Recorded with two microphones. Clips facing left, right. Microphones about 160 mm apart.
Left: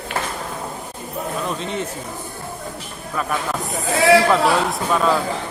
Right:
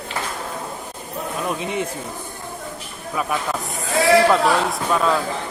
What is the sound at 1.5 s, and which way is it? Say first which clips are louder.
Speech: right 1 dB; 15° right (ahead or behind).